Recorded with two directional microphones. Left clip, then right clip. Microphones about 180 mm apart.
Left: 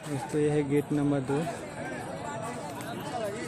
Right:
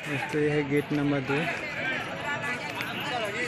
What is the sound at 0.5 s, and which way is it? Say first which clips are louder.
Speech: right 1 dB; 20° left (ahead or behind).